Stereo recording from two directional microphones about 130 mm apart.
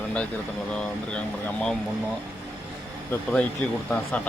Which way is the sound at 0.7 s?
10° left (ahead or behind).